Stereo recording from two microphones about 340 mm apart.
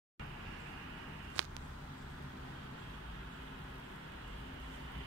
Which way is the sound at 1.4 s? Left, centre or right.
Right.